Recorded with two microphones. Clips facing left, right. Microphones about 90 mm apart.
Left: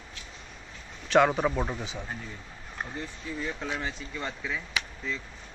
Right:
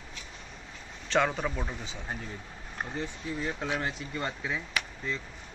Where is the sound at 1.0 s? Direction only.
10° left (ahead or behind).